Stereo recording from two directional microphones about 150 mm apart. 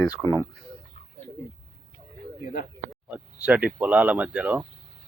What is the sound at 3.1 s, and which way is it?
Speech, 10° right (ahead or behind).